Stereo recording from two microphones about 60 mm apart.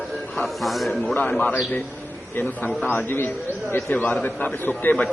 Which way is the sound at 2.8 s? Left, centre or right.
Left.